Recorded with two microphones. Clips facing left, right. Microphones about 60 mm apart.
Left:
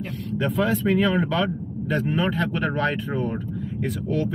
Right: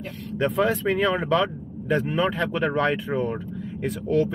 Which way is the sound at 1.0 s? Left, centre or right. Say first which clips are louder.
Even; centre.